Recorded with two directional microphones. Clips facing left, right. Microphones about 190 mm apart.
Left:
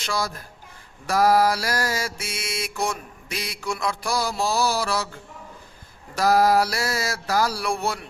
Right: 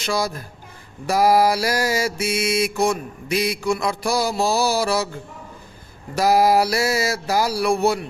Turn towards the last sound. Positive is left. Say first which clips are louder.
# right 7 dB
turn(degrees=-5)  # may be behind; listen again after turning